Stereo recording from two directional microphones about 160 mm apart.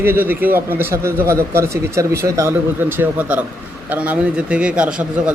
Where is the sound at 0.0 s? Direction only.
15° right (ahead or behind).